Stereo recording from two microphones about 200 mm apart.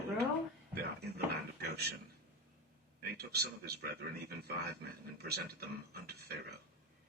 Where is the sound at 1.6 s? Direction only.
55° right (ahead or behind).